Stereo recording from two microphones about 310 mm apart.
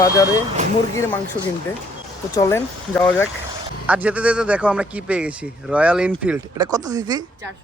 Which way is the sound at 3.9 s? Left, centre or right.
Centre.